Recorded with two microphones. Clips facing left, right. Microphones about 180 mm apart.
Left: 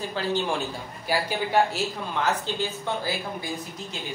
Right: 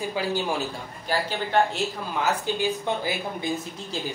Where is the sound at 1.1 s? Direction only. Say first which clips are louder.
Left 1 dB; 10° left (ahead or behind).